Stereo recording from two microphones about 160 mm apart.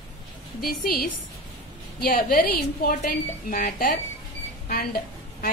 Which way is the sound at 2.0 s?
65° left (ahead or behind).